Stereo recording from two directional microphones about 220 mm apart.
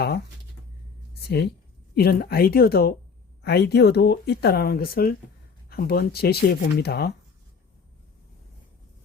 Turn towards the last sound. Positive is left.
turn(degrees=45)  # may be behind; listen again after turning